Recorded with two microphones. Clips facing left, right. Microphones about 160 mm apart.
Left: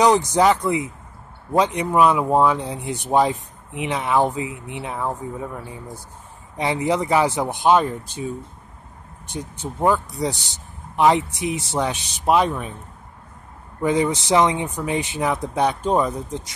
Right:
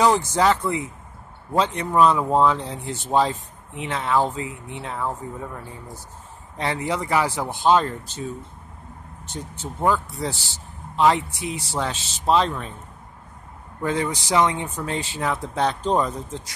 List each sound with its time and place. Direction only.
0.0 s speech: 15° left (ahead or behind)
9.3 s speech: 15° left (ahead or behind)
13.8 s speech: 20° left (ahead or behind)